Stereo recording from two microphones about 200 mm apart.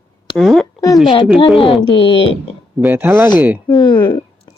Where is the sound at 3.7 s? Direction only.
20° left (ahead or behind).